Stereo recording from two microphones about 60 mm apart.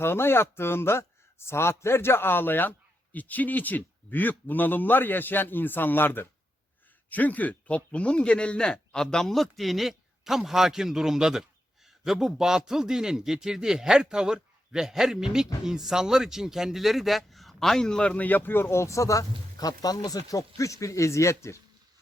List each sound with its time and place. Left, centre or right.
0.0 s a man's voice: left; by 18.1 s centre
18.1 s speech: left